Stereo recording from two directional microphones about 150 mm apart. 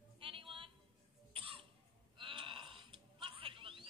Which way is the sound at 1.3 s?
35° right (ahead or behind).